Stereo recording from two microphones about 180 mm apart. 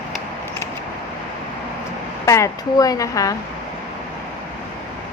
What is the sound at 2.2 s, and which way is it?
A woman's voice, 15° left (ahead or behind).